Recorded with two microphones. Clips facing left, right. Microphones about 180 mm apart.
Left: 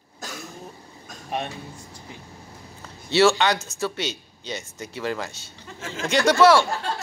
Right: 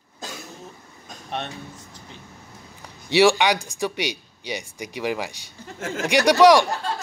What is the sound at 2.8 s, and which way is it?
Speech, 15° right (ahead or behind).